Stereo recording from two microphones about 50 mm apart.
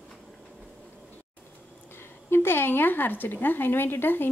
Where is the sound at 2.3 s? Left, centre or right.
Left.